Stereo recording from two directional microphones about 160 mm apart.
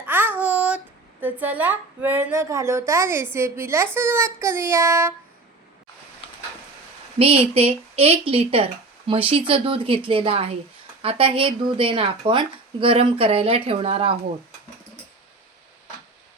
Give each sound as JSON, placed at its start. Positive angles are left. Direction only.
{"t": 0.0, "sound": "a sound", "side_deg": -10}
{"t": 1.2, "sound": "a woman's voice", "side_deg": -10}
{"t": 7.2, "sound": "speech", "side_deg": -35}